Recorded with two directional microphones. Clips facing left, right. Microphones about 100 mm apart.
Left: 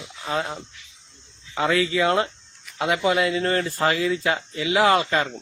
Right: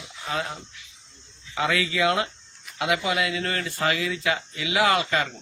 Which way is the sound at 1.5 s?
25° left (ahead or behind).